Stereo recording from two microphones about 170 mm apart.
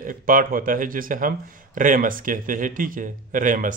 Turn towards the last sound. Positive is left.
turn(degrees=-50)  # may be behind; listen again after turning